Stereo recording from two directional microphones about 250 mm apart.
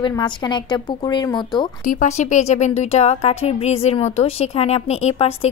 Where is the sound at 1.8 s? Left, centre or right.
Left.